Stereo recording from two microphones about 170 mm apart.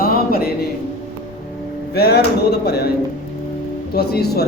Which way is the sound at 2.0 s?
70° left (ahead or behind).